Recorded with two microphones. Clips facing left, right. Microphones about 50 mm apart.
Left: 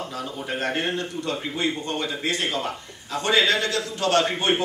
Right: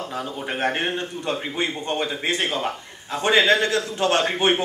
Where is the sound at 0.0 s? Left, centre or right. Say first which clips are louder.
Right 2 dB; right.